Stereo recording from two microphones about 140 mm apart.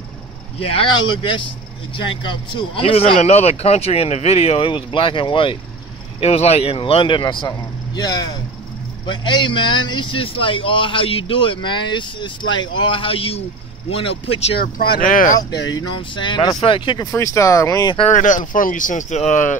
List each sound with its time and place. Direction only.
0.6 s speech: 40° left (ahead or behind)
6.2 s speech: 45° left (ahead or behind)
14.6 s speech: 90° left; by 15.3 s 75° left (ahead or behind)
15.3 s speech: 30° left (ahead or behind)
17.1 s speech: 20° left (ahead or behind)
18.1 s speech: 65° left (ahead or behind)